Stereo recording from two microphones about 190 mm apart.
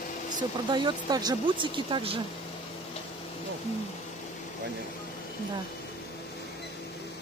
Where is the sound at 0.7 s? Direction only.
25° right (ahead or behind).